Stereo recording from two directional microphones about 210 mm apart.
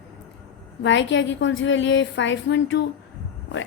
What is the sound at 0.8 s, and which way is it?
Speech, 60° left (ahead or behind).